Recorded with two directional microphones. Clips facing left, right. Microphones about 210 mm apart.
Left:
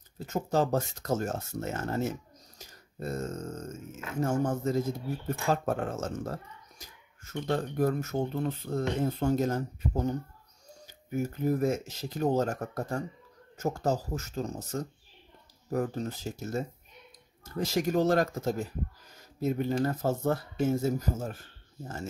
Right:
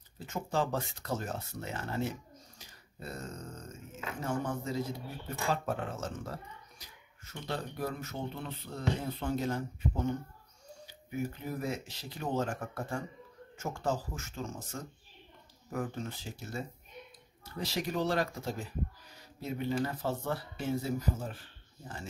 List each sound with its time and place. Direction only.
0.3 s speech: 40° left (ahead or behind)